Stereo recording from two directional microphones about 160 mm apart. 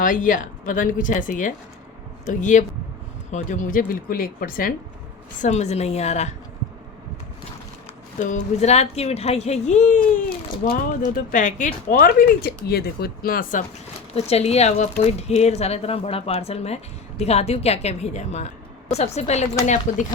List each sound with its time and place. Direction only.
0.0 s speech: 55° left (ahead or behind)
5.4 s speech: 45° left (ahead or behind)
8.2 s speech: 50° left (ahead or behind)
9.9 s speech: 65° left (ahead or behind)
14.1 s a woman's voice: 40° left (ahead or behind)